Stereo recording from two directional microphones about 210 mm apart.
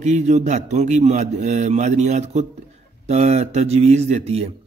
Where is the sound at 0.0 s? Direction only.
35° right (ahead or behind).